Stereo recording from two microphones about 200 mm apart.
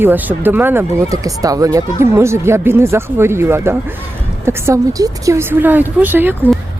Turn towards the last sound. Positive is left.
turn(degrees=-10)  # may be behind; listen again after turning